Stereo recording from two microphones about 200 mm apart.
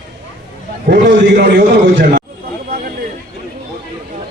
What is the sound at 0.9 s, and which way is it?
A man's voice, 60° right (ahead or behind).